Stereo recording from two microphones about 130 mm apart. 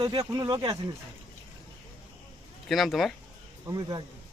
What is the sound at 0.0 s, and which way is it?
Speech, 30° right (ahead or behind).